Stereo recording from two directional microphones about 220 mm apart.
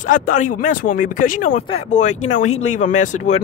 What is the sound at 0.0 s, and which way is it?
Speech, 35° left (ahead or behind).